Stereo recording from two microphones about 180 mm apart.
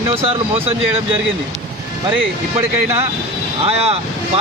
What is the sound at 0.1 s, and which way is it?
Speech, 30° right (ahead or behind).